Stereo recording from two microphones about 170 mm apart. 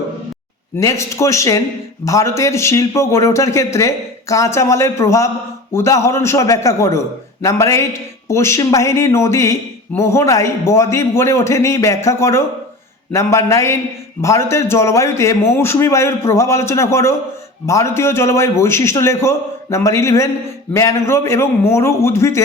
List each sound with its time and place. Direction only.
0.8 s speech: 20° left (ahead or behind)